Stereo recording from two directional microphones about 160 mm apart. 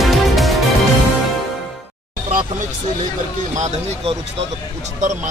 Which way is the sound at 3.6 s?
45° right (ahead or behind).